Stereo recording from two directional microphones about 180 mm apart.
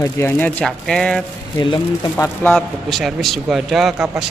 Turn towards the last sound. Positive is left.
turn(degrees=0)  # may be behind; listen again after turning